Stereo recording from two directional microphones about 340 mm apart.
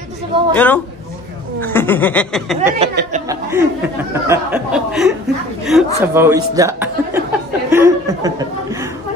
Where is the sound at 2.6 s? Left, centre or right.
Centre.